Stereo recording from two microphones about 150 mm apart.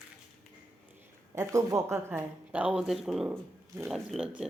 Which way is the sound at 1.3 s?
20° right (ahead or behind).